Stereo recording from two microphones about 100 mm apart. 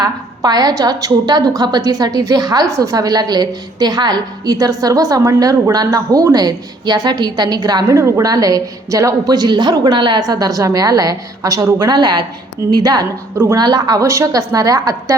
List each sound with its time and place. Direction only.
0.0 s a woman's voice: 40° right (ahead or behind)
7.9 s a woman's voice: 30° right (ahead or behind)
13.3 s a woman's voice: 30° right (ahead or behind)